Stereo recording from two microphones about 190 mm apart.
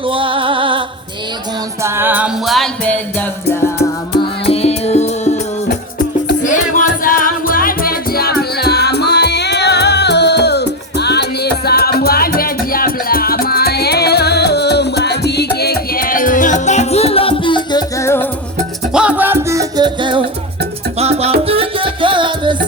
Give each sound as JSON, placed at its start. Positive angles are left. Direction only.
{"t": 0.1, "sound": "music", "side_deg": -25}
{"t": 1.8, "sound": "music", "side_deg": -10}
{"t": 4.4, "sound": "music", "side_deg": 30}
{"t": 18.9, "sound": "music", "side_deg": -10}